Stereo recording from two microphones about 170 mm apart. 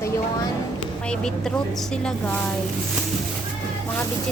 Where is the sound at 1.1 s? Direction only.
5° left (ahead or behind).